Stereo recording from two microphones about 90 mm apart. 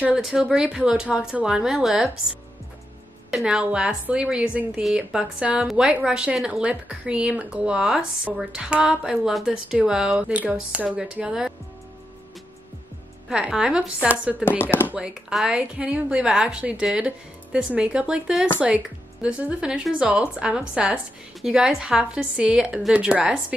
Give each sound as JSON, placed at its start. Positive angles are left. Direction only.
{"t": 0.2, "sound": "a woman's voice", "side_deg": -5}
{"t": 3.3, "sound": "a woman's voice", "side_deg": -10}
{"t": 13.3, "sound": "a woman's voice", "side_deg": -10}
{"t": 14.6, "sound": "speech", "side_deg": 25}
{"t": 15.0, "sound": "a woman's voice", "side_deg": -10}